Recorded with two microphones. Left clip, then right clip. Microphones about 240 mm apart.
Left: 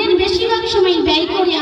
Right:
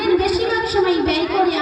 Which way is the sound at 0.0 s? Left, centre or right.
Centre.